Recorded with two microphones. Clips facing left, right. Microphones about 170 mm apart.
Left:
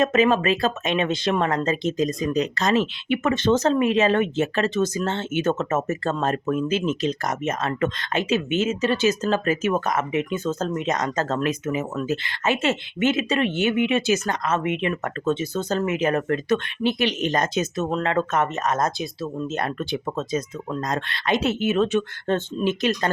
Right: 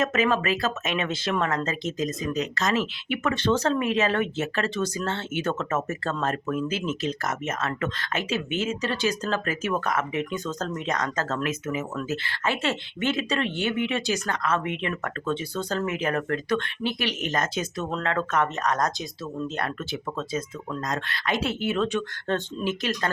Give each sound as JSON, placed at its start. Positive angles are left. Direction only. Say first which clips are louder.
{"t": 0.0, "sound": "speech", "louder": "left 5 dB", "side_deg": 25}